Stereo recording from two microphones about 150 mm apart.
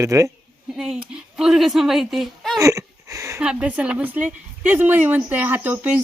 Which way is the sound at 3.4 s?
5° right (ahead or behind).